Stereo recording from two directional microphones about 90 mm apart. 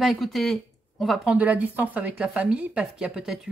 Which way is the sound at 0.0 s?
Centre (ahead or behind).